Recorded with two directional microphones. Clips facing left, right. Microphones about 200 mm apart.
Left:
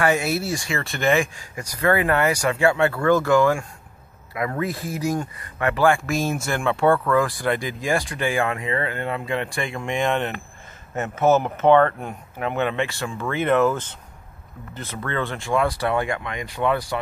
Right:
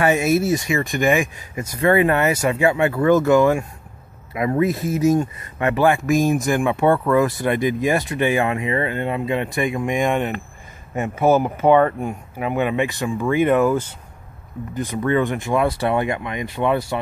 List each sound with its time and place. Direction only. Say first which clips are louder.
0.0 s speech: right 4 dB; 20° right (ahead or behind)